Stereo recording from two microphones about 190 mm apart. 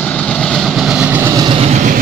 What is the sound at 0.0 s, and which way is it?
Vehicle, 5° left (ahead or behind).